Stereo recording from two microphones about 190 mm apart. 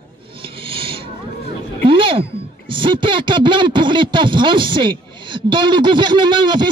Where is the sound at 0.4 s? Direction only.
25° right (ahead or behind).